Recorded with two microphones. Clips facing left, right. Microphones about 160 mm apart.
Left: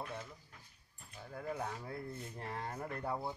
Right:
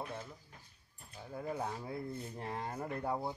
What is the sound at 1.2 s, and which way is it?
Speech, 10° right (ahead or behind).